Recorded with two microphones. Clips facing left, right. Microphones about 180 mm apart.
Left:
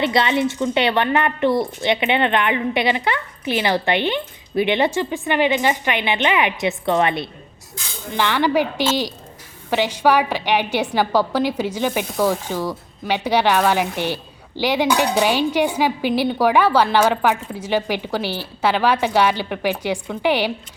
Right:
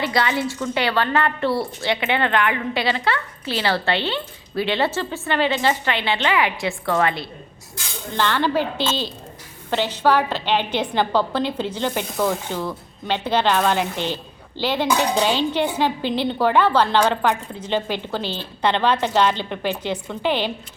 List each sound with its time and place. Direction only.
0.0 s a woman's voice: 25° left (ahead or behind)